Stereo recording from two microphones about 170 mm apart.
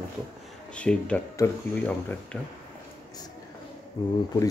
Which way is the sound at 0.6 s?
5° left (ahead or behind).